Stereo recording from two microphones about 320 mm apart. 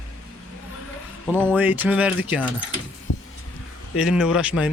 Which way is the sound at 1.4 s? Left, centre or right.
Centre.